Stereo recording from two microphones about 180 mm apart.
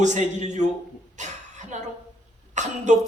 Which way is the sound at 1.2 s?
40° right (ahead or behind).